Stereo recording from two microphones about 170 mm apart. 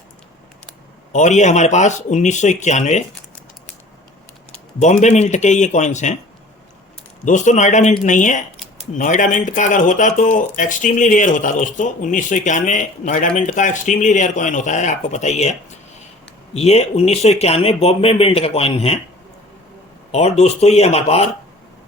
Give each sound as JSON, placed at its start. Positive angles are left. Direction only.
{"t": 1.1, "sound": "speech", "side_deg": 45}
{"t": 4.8, "sound": "speech", "side_deg": 45}
{"t": 7.3, "sound": "speech", "side_deg": 45}
{"t": 16.6, "sound": "speech", "side_deg": 40}
{"t": 20.1, "sound": "speech", "side_deg": 40}